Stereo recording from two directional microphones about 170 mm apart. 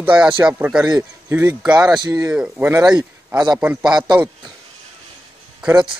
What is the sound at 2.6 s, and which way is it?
Speech, 20° right (ahead or behind).